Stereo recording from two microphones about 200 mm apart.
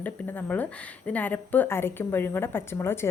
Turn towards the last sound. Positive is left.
turn(degrees=10)  # may be behind; listen again after turning